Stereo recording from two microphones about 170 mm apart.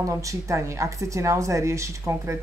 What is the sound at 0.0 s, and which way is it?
A woman's voice, 20° right (ahead or behind).